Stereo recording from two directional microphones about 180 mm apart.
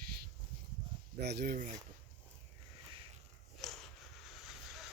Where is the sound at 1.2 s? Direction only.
65° right (ahead or behind).